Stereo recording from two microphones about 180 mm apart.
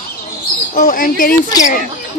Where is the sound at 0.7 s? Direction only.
50° left (ahead or behind).